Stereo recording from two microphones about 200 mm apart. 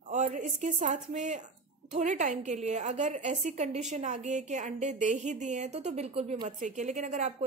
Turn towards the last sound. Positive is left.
turn(degrees=-35)  # may be behind; listen again after turning